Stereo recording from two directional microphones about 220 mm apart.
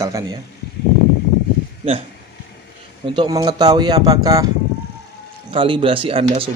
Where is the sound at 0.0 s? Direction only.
15° right (ahead or behind).